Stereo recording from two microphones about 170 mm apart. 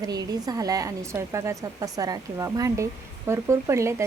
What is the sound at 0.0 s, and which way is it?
A woman's voice, 20° right (ahead or behind).